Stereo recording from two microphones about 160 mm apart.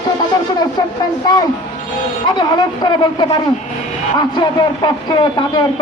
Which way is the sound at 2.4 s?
25° left (ahead or behind).